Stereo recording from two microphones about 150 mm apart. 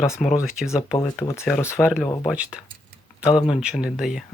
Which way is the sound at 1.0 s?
20° left (ahead or behind).